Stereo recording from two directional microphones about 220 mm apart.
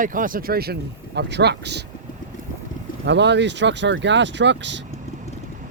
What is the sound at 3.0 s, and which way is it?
Speech, 50° right (ahead or behind).